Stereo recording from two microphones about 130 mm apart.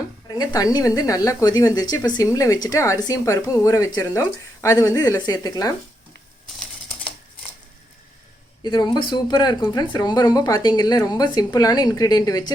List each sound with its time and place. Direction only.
0.3 s speech: 30° left (ahead or behind)
6.6 s typewriter: 5° left (ahead or behind)
8.6 s speech: 35° left (ahead or behind)